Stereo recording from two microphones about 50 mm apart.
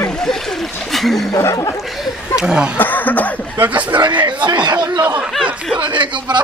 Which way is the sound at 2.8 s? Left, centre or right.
Left.